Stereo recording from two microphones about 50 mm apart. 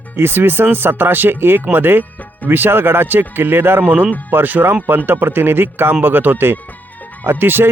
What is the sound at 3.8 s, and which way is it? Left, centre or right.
Speech, right.